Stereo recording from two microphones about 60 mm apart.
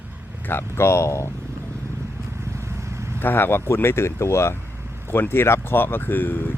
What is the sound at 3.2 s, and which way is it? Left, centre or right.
Speech, left.